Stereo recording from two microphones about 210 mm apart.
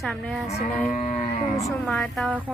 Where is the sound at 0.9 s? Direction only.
35° left (ahead or behind).